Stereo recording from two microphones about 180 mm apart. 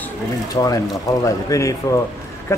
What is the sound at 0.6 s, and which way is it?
Speech, 20° left (ahead or behind).